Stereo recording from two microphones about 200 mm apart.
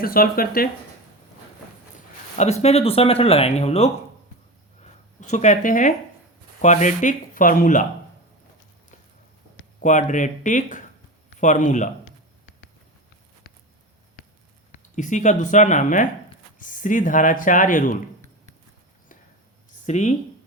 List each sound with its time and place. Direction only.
0.0 s speech: 45° left (ahead or behind)
2.4 s speech: 35° left (ahead or behind)
9.8 s speech: 40° left (ahead or behind)
13.5 s a sound: 50° left (ahead or behind)
14.9 s speech: 35° left (ahead or behind)
19.8 s speech: 35° left (ahead or behind)